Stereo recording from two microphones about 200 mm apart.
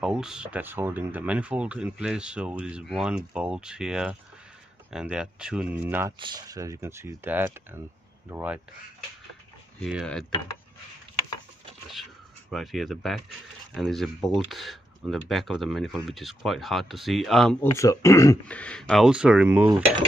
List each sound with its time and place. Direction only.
0.0 s speech: 5° right (ahead or behind)
6.1 s speech: 20° right (ahead or behind)
9.8 s speech: centre (ahead or behind)
11.9 s speech: centre (ahead or behind)
17.6 s speech: 15° left (ahead or behind); by 19.7 s 10° right (ahead or behind)